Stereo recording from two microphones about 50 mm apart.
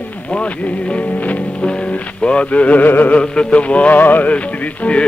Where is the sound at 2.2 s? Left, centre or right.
Left.